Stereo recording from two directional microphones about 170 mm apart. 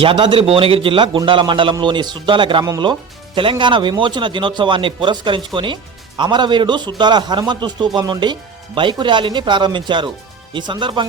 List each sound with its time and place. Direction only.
0.0 s a man's voice: 30° right (ahead or behind)